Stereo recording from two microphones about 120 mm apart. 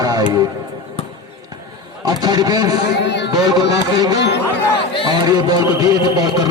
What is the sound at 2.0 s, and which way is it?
A man's voice, 35° right (ahead or behind).